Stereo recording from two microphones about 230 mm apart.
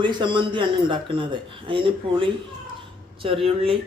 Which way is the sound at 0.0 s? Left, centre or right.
Centre.